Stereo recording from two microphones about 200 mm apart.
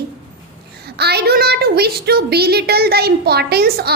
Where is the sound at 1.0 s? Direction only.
55° right (ahead or behind).